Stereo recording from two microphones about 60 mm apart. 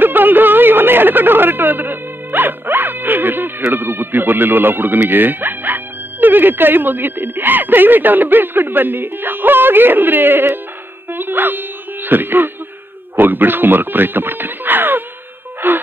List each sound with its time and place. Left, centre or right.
0.0 s speech: right